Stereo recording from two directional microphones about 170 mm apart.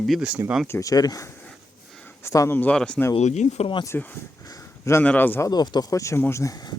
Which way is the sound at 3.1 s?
40° left (ahead or behind).